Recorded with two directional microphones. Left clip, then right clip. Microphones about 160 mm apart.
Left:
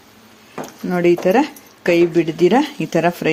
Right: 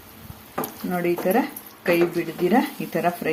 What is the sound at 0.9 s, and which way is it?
A woman's voice, 75° left (ahead or behind).